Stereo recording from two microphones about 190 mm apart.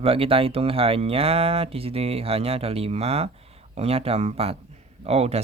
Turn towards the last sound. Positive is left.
turn(degrees=-35)  # may be behind; listen again after turning